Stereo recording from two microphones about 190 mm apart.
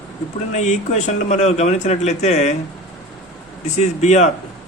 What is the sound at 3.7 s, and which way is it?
Speech, 35° left (ahead or behind).